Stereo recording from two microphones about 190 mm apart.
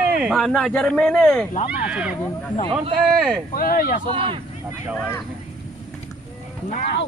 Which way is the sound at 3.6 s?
50° left (ahead or behind).